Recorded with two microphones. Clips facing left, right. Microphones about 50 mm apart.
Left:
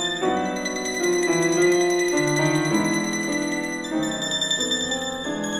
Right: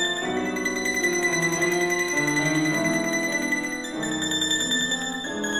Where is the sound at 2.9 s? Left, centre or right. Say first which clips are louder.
Even; right.